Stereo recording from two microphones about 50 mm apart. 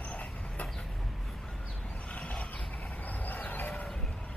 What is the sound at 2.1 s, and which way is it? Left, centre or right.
Mechanisms, left.